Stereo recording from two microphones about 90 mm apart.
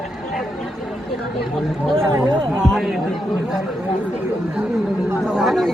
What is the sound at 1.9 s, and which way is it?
Speech, 35° right (ahead or behind).